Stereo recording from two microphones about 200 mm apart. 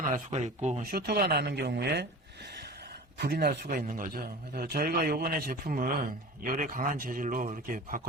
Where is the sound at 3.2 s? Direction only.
50° right (ahead or behind).